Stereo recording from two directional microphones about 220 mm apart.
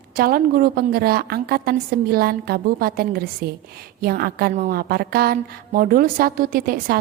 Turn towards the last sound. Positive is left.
turn(degrees=-40)  # may be behind; listen again after turning